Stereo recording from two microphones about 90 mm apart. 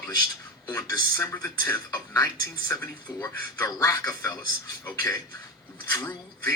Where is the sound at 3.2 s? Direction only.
35° left (ahead or behind).